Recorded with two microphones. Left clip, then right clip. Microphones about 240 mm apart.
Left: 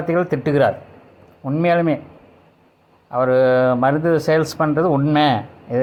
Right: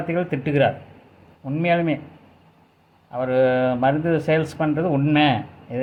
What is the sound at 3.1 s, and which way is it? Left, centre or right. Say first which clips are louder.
Speech: left 4 dB; left.